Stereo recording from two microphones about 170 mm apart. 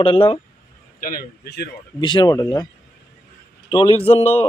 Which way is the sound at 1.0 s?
70° left (ahead or behind).